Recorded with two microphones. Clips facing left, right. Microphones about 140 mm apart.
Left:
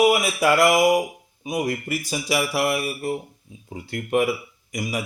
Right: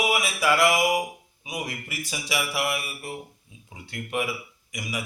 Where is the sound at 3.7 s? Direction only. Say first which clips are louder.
Left 9 dB; 40° left (ahead or behind).